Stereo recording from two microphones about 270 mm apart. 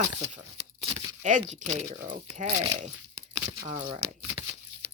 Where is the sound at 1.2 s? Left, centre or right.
Right.